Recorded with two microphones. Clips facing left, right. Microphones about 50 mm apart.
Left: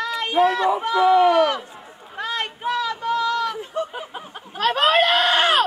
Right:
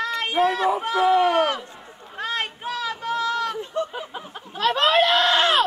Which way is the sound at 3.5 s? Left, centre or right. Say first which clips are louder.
Even; centre.